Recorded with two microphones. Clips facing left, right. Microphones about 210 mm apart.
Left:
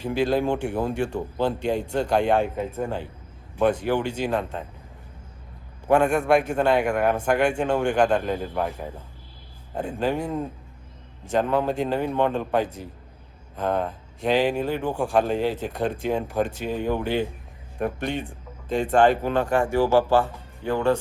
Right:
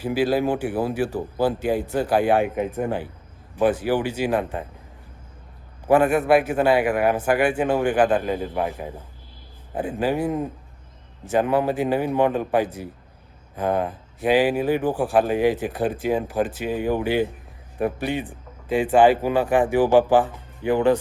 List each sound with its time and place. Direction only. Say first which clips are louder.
0.0 s speech: right 2 dB; 5° right (ahead or behind)
3.5 s a man's voice: right 1 dB; 5° right (ahead or behind)
5.9 s speech: right 2 dB; 5° right (ahead or behind)
10.0 s a man's voice: right 3 dB; 5° right (ahead or behind)